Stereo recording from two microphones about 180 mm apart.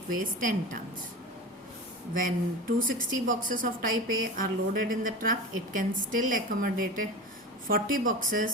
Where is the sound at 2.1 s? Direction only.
50° right (ahead or behind).